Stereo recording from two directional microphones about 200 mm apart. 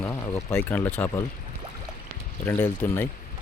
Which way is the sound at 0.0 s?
15° left (ahead or behind).